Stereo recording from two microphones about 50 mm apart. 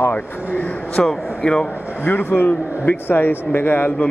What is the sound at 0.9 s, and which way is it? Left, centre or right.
Speech, centre.